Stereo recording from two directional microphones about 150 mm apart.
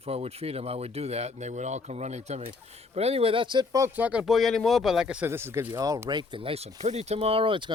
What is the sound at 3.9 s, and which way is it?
Speech, 10° right (ahead or behind).